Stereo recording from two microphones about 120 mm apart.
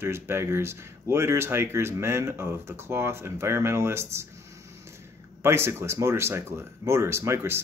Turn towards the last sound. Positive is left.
turn(degrees=-20)  # may be behind; listen again after turning